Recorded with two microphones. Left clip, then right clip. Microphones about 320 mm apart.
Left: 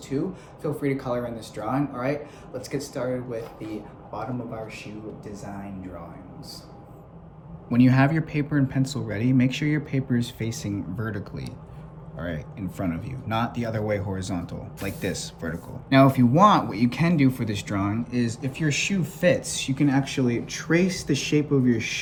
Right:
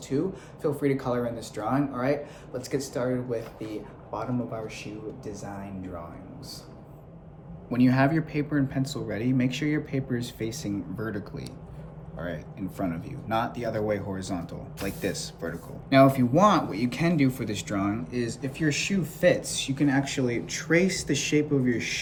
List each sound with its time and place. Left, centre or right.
0.1 s speech: centre
7.7 s speech: left